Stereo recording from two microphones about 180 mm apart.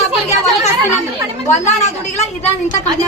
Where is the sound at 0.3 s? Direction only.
40° left (ahead or behind).